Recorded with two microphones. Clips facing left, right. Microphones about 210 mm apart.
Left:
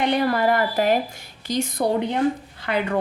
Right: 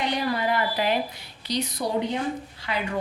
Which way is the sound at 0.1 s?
55° left (ahead or behind).